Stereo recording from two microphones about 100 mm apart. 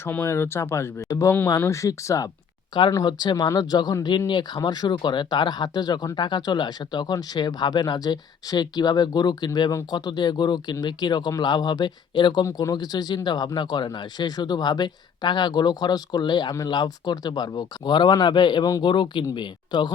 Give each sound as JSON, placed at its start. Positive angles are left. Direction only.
{"t": 0.0, "sound": "speech", "side_deg": 25}
{"t": 3.0, "sound": "speech", "side_deg": 45}